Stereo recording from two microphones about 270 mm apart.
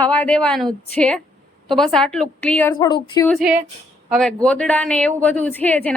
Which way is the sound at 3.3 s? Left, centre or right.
Centre.